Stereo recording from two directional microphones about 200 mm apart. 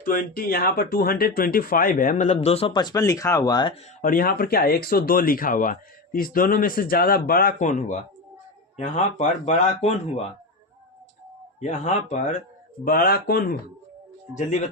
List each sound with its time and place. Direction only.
0.0 s speech: 45° left (ahead or behind); by 3.8 s 20° left (ahead or behind)
4.0 s speech: 45° left (ahead or behind)
11.6 s speech: 35° left (ahead or behind)
12.8 s speech: 50° left (ahead or behind)